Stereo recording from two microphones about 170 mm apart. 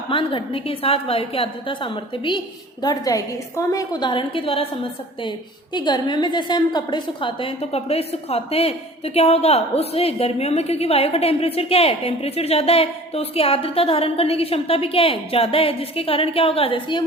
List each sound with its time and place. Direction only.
0.1 s a woman's voice: 30° left (ahead or behind)